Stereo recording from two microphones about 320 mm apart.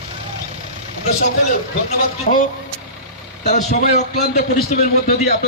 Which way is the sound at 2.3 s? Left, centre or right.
Left.